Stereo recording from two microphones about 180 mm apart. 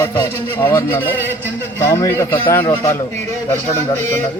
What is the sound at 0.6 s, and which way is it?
A man's voice, 10° left (ahead or behind).